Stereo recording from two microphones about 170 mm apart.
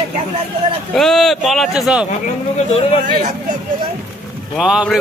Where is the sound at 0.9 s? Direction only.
Centre (ahead or behind).